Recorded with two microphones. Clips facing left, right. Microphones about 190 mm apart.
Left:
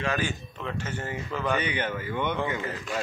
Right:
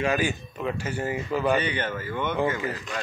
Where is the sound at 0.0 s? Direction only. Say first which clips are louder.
Right 4 dB; 15° right (ahead or behind).